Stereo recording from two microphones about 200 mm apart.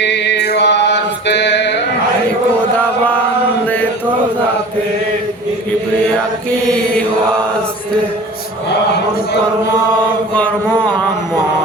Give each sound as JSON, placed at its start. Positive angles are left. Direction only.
{"t": 0.0, "sound": "mantra", "side_deg": 60}